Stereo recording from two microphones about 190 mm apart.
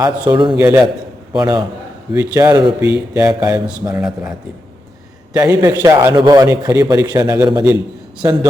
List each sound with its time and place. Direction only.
0.0 s a man's voice: 25° right (ahead or behind)
0.5 s a man's voice: 15° right (ahead or behind)
5.3 s a man's voice: 15° right (ahead or behind)